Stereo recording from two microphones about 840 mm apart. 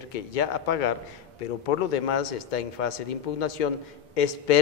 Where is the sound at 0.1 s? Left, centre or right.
Left.